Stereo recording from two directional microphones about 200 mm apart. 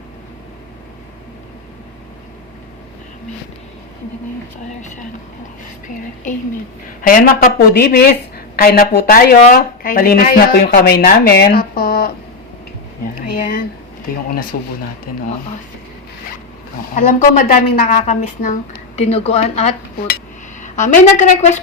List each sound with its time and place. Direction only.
7.0 s speech: 45° left (ahead or behind)
13.2 s speech: 45° left (ahead or behind)
16.9 s a woman's voice: 40° left (ahead or behind)